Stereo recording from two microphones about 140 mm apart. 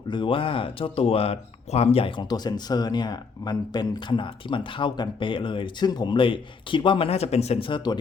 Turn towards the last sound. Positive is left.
turn(degrees=35)  # may be behind; listen again after turning